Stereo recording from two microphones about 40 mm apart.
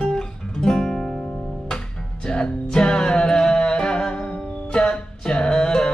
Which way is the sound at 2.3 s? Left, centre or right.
Centre.